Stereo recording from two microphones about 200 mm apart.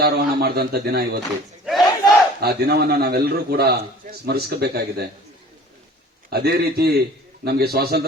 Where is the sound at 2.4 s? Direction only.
50° right (ahead or behind).